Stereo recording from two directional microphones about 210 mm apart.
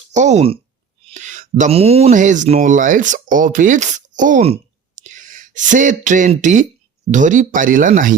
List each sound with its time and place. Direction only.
0.1 s speech: 35° right (ahead or behind)